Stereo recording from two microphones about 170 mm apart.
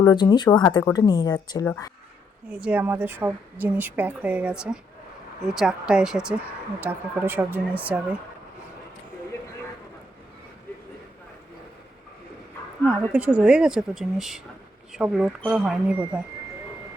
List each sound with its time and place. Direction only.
0.0 s speech: 25° left (ahead or behind)
1.6 s speech: 10° left (ahead or behind)
2.5 s speech: 5° right (ahead or behind)
13.1 s speech: 10° right (ahead or behind)